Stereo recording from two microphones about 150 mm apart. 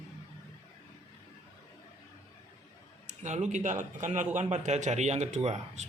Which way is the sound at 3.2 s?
50° right (ahead or behind).